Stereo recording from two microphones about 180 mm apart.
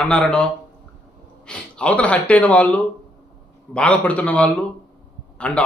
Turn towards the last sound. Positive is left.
turn(degrees=5)  # may be behind; listen again after turning